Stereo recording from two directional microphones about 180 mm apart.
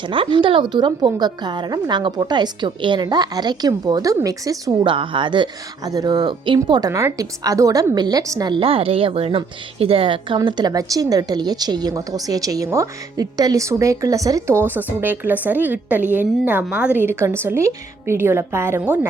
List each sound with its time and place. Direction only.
0.1 s a woman's voice: 30° right (ahead or behind); by 18.9 s 10° right (ahead or behind)